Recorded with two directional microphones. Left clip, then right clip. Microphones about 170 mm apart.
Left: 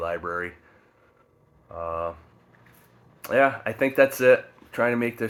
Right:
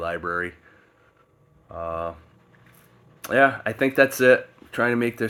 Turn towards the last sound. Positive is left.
turn(degrees=-50)  # may be behind; listen again after turning